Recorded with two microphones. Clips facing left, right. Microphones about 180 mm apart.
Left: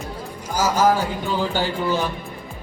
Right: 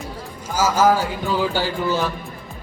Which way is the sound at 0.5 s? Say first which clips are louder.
Right 1 dB; 10° right (ahead or behind).